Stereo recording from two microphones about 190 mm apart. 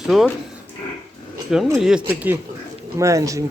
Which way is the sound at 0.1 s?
Centre (ahead or behind).